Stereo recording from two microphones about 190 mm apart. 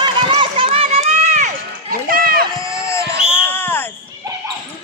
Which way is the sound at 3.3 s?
10° left (ahead or behind).